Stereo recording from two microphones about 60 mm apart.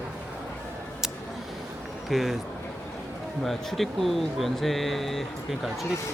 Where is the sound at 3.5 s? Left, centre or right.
Centre.